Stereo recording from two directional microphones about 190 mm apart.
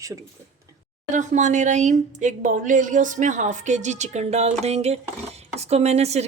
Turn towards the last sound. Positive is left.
turn(degrees=-35)  # may be behind; listen again after turning